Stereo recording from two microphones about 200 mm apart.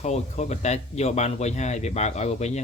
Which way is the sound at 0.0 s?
35° left (ahead or behind).